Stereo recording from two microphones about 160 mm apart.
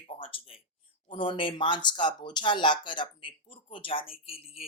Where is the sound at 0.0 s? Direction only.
35° left (ahead or behind).